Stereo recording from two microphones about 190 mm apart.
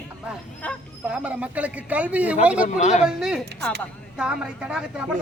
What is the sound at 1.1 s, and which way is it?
A man's voice, 5° right (ahead or behind).